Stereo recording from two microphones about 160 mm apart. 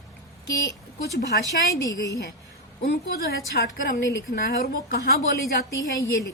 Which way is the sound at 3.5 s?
85° left.